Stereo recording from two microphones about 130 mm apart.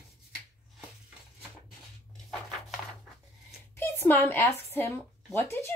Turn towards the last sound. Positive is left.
turn(degrees=20)  # may be behind; listen again after turning